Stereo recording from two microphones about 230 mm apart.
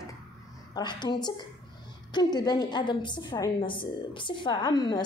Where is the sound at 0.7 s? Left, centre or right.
Centre.